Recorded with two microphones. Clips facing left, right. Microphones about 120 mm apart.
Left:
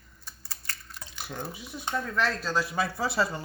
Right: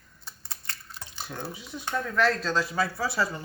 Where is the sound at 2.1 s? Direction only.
Centre (ahead or behind).